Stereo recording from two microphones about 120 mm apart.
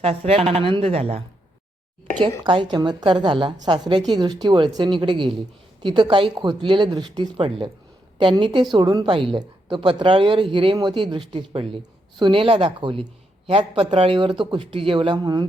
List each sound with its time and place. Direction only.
0.0 s a woman's voice: 55° right (ahead or behind)
2.4 s a woman's voice: 40° right (ahead or behind)